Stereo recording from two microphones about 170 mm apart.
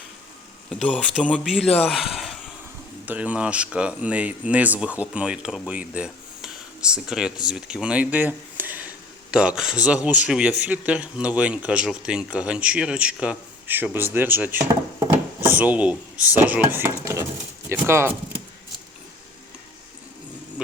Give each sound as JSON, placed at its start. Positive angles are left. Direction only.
{"t": 0.7, "sound": "speech", "side_deg": 5}
{"t": 1.6, "sound": "speech", "side_deg": 35}
{"t": 1.9, "sound": "a sound", "side_deg": 0}
{"t": 3.1, "sound": "speech", "side_deg": -10}